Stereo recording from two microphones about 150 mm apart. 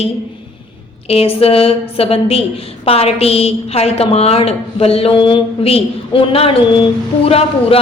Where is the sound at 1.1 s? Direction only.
40° left (ahead or behind).